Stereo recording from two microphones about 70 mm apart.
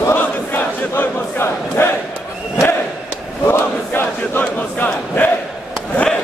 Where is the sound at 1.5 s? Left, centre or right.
Left.